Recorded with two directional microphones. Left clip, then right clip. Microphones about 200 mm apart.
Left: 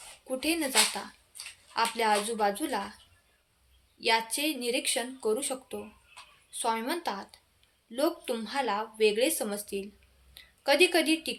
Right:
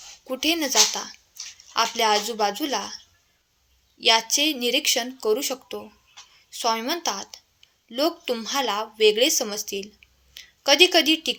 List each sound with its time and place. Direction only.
0.3 s a woman's voice: 35° right (ahead or behind)
4.0 s a woman's voice: 30° right (ahead or behind)